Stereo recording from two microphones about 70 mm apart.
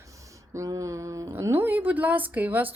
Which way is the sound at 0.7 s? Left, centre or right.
Right.